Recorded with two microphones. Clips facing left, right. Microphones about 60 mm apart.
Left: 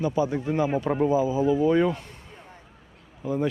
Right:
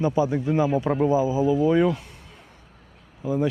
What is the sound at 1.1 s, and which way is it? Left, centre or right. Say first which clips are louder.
Speech: right 1 dB; centre.